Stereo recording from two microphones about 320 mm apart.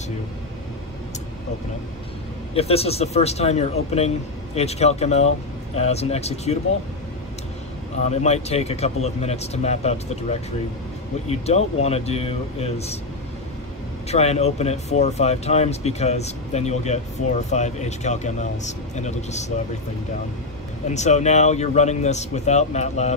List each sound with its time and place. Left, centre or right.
2.5 s speech: centre
8.1 s speech: left
11.2 s speech: centre
14.0 s speech: centre
20.9 s speech: left